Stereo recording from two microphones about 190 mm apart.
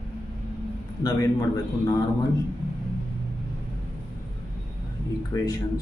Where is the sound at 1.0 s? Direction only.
20° left (ahead or behind).